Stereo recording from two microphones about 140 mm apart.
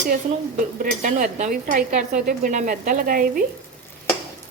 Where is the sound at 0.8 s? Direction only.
65° right (ahead or behind); by 3.4 s 90° right.